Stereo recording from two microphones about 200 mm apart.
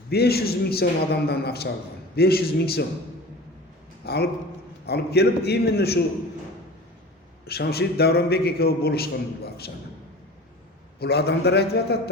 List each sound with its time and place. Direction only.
0.1 s a man's voice: 50° left (ahead or behind)
4.0 s a man's voice: 55° left (ahead or behind)
7.4 s a man's voice: 50° left (ahead or behind)
11.0 s a man's voice: 55° left (ahead or behind)